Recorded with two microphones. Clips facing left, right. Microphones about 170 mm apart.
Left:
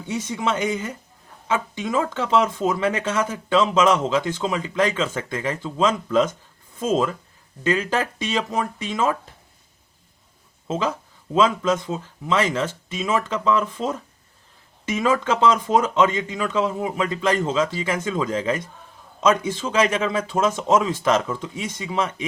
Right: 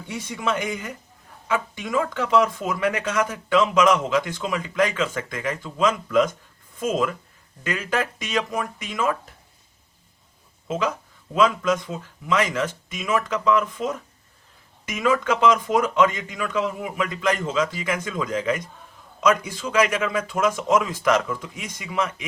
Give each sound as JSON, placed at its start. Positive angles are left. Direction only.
{"t": 0.1, "sound": "speech", "side_deg": 25}
{"t": 10.7, "sound": "speech", "side_deg": 30}